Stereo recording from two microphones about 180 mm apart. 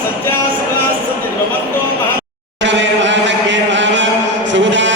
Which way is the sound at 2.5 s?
85° right.